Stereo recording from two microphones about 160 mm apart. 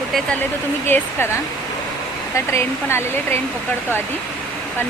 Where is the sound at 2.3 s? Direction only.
15° left (ahead or behind).